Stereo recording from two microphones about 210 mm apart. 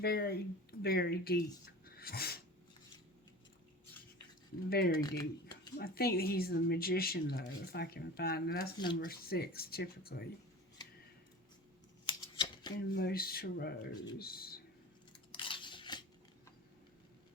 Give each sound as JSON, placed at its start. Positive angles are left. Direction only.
{"t": 0.0, "sound": "speech", "side_deg": 50}
{"t": 1.8, "sound": "a sound", "side_deg": 45}
{"t": 4.9, "sound": "speech", "side_deg": 20}
{"t": 5.5, "sound": "speech", "side_deg": 50}
{"t": 12.0, "sound": "scissors", "side_deg": 20}
{"t": 12.9, "sound": "speech", "side_deg": 50}
{"t": 15.3, "sound": "scissors", "side_deg": 25}